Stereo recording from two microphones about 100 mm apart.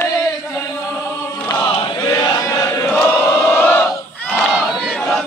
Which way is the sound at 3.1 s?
20° left (ahead or behind).